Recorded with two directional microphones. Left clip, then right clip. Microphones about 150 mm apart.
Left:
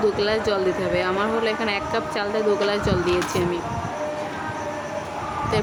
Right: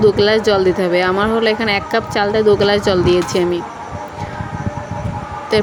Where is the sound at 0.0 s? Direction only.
40° right (ahead or behind).